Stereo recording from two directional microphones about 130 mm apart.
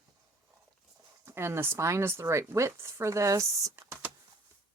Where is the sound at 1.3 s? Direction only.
20° right (ahead or behind).